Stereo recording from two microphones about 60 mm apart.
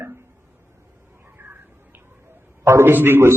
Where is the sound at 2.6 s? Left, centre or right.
Right.